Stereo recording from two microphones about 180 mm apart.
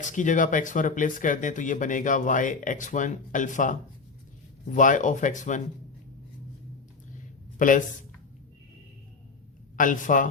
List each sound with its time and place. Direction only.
0.0 s speech: 45° left (ahead or behind)
7.6 s speech: 45° left (ahead or behind)
9.7 s speech: 45° left (ahead or behind)